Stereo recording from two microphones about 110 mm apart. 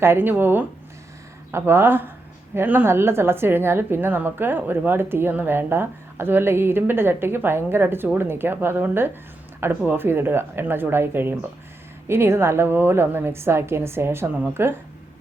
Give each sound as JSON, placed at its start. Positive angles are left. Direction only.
{"t": 0.0, "sound": "speech", "side_deg": -20}